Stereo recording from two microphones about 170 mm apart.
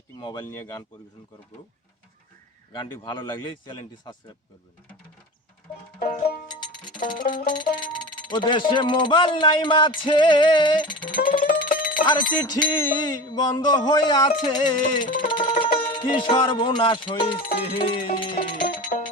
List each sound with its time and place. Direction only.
0.2 s music: 25° left (ahead or behind)
2.7 s music: 30° left (ahead or behind)
6.7 s music: 25° left (ahead or behind)